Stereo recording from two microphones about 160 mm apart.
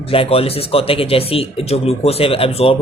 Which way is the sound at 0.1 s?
35° left (ahead or behind).